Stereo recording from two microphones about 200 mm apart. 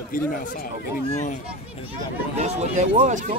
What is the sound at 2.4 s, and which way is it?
Speech, 35° right (ahead or behind).